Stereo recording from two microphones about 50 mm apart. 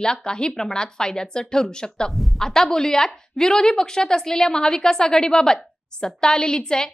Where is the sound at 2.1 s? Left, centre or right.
Centre.